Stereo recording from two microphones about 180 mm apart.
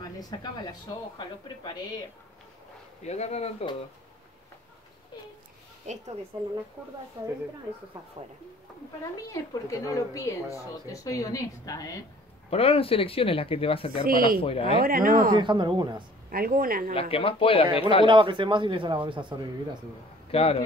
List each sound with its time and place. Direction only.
0.0 s speech: 20° left (ahead or behind)
3.0 s speech: 35° left (ahead or behind)
5.9 s a woman's voice: 40° right (ahead or behind)
6.8 s a woman's voice: 10° right (ahead or behind)
9.3 s speech: 20° left (ahead or behind)
12.4 s speech: 35° left (ahead or behind)
14.0 s speech: 55° right (ahead or behind)
14.4 s speech: 30° left (ahead or behind)
14.8 s speech: 50° right (ahead or behind)
15.3 s a man's voice: 25° right (ahead or behind)
16.3 s speech: 55° right (ahead or behind)
16.9 s speech: 30° left (ahead or behind)
18.0 s a man's voice: 25° right (ahead or behind)
20.2 s a man's voice: 35° left (ahead or behind)